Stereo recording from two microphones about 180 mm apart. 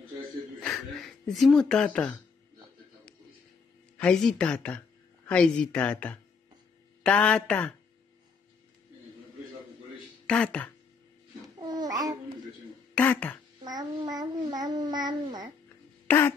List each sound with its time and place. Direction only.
0.6 s a sound: centre (ahead or behind)
4.0 s a man's voice: 5° left (ahead or behind)
10.2 s speech: 5° left (ahead or behind)
11.6 s babbling: 20° right (ahead or behind)
12.9 s throat clearing: 10° left (ahead or behind)
13.7 s child singing: 20° right (ahead or behind)
16.1 s a man's voice: 10° left (ahead or behind)